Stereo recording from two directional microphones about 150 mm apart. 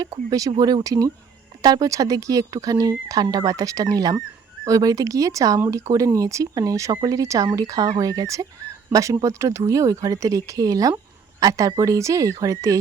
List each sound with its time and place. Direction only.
0.3 s speech: 25° right (ahead or behind)